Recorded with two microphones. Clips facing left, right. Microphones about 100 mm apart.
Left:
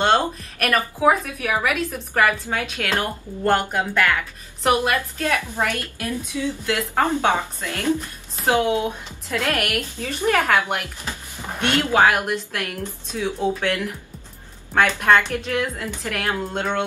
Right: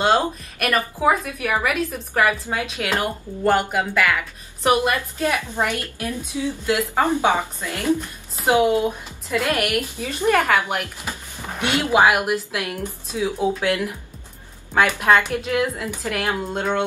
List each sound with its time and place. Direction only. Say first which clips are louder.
0.0 s a woman's voice: even; 5° right (ahead or behind)
4.9 s a woman's voice: even; 15° right (ahead or behind)
10.4 s a woman's voice: even; 5° right (ahead or behind)
14.9 s a woman's voice: even; 10° right (ahead or behind)